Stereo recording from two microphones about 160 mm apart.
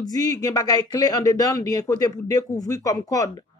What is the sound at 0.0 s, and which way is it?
A man's voice, 25° left (ahead or behind).